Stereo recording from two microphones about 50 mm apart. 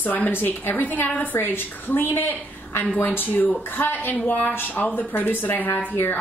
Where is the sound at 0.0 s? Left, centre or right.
Left.